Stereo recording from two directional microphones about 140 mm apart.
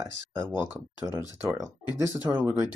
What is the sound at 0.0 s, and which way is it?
Speech, 15° right (ahead or behind).